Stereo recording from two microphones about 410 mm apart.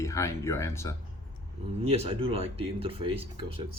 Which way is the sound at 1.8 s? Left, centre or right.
Centre.